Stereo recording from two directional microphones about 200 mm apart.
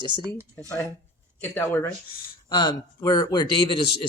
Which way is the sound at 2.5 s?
25° left (ahead or behind).